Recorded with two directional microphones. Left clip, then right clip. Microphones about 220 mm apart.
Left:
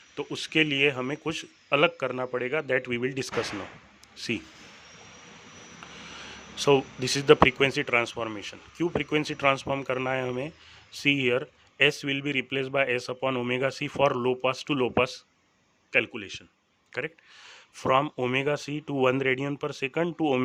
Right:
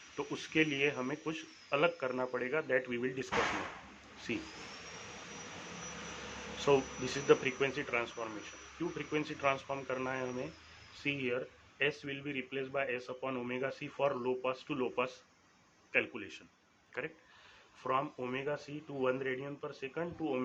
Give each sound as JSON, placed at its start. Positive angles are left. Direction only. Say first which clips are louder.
{"t": 0.2, "sound": "a man's voice", "louder": "left 7 dB", "side_deg": 45}
{"t": 6.6, "sound": "a man's voice", "louder": "left 8 dB", "side_deg": 50}
{"t": 17.7, "sound": "speech", "louder": "left 11 dB", "side_deg": 55}